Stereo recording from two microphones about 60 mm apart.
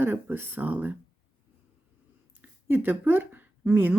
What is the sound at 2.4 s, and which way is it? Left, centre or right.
Speech, right.